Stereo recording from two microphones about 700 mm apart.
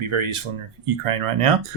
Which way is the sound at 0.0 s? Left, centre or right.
Right.